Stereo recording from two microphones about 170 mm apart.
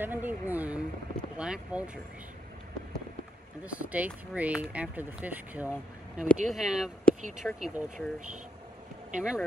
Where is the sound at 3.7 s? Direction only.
10° right (ahead or behind).